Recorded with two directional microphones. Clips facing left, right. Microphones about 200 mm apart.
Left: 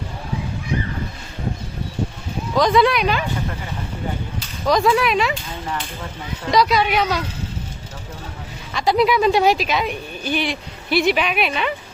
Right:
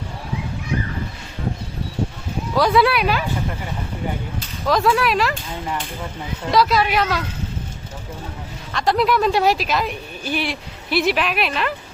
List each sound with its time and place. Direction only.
2.6 s speech: 5° right (ahead or behind)
4.6 s speech: centre (ahead or behind)
6.5 s speech: centre (ahead or behind)
8.7 s speech: centre (ahead or behind)